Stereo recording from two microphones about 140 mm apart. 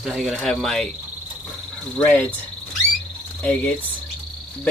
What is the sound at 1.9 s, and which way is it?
Speech, 10° left (ahead or behind).